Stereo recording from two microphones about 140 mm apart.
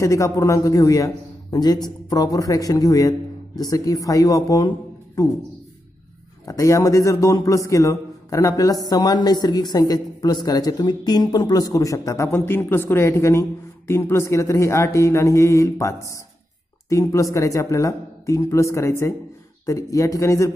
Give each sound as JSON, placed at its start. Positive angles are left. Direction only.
{"t": 0.0, "sound": "a man's voice", "side_deg": 25}
{"t": 6.4, "sound": "a man's voice", "side_deg": 25}